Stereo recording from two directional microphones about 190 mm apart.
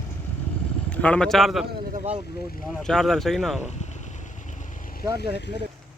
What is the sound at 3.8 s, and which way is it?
Vehicle, 40° left (ahead or behind).